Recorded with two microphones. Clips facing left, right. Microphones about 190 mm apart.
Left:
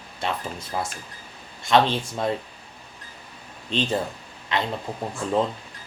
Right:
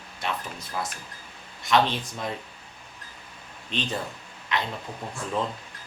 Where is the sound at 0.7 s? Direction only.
25° left (ahead or behind).